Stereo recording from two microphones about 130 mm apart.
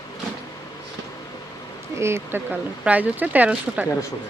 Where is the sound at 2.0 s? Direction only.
20° right (ahead or behind).